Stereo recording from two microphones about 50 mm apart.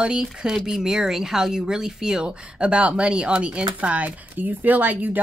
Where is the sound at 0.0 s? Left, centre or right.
Centre.